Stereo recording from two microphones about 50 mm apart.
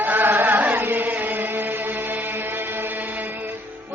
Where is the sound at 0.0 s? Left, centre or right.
Right.